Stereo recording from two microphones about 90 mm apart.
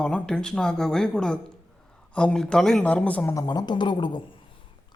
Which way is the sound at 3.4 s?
50° left (ahead or behind).